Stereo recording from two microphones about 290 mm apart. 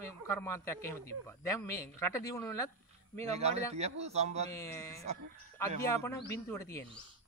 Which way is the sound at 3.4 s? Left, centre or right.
Right.